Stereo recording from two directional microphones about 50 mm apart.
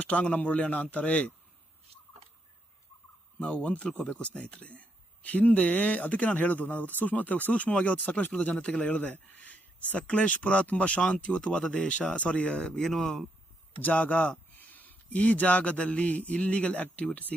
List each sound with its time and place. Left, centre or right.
0.0 s speech: left
3.4 s speech: left; by 13.2 s centre
13.7 s speech: left